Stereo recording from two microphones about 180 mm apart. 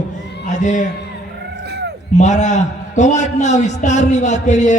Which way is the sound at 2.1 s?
40° left (ahead or behind).